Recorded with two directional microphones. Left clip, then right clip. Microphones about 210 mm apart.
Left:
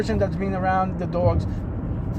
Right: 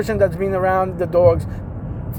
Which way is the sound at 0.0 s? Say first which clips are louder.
Right 7 dB; 60° right (ahead or behind).